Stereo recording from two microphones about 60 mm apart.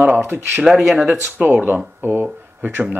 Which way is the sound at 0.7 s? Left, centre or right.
Centre.